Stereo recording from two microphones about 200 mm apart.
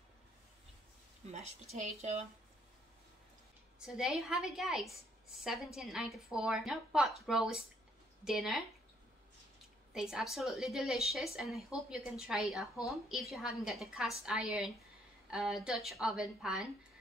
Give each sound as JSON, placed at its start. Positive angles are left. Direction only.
{"t": 1.3, "sound": "a woman's voice", "side_deg": -35}
{"t": 3.8, "sound": "speech", "side_deg": -5}
{"t": 9.9, "sound": "speech", "side_deg": -5}